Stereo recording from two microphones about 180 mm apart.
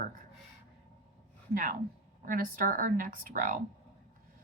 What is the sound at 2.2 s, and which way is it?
Speech, 50° right (ahead or behind).